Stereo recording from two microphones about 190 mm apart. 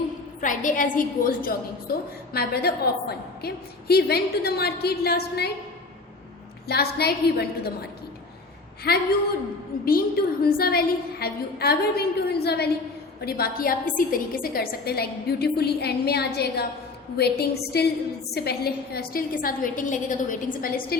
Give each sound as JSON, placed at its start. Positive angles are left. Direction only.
{"t": 0.4, "sound": "a woman's voice", "side_deg": 45}
{"t": 6.7, "sound": "a woman's voice", "side_deg": 55}
{"t": 8.9, "sound": "a woman's voice", "side_deg": 55}
{"t": 10.4, "sound": "a woman's voice", "side_deg": 50}